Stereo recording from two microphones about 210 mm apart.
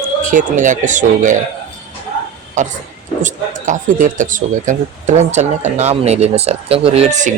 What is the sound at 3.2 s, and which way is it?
Speech, 35° right (ahead or behind).